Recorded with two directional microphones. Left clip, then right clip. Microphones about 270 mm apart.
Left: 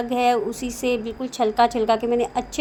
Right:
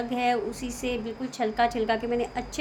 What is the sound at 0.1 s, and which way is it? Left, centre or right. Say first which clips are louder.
A woman's voice: left 7 dB; left.